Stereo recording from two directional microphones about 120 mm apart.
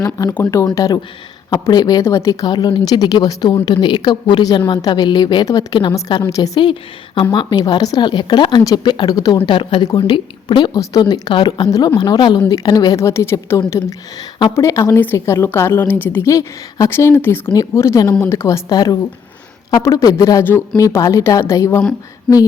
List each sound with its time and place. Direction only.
0.0 s a woman's voice: 30° left (ahead or behind)
9.5 s a woman's voice: 45° left (ahead or behind)
10.8 s a woman's voice: 35° left (ahead or behind)
18.7 s a woman's voice: 35° left (ahead or behind)
20.4 s a woman's voice: 15° left (ahead or behind)
20.7 s a woman's voice: 30° left (ahead or behind)